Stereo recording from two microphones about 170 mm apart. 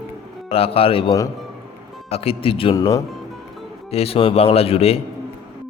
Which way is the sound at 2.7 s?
20° left (ahead or behind).